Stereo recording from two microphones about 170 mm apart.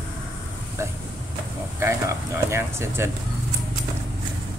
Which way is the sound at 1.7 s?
15° right (ahead or behind).